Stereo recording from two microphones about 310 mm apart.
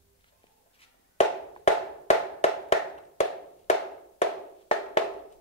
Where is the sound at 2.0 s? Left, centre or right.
Left.